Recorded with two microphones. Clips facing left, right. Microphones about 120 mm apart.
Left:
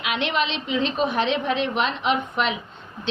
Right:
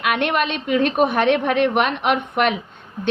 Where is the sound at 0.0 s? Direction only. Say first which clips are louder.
Right 4 dB; 55° right (ahead or behind).